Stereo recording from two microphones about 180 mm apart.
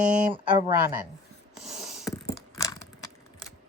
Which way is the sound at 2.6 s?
20° left (ahead or behind).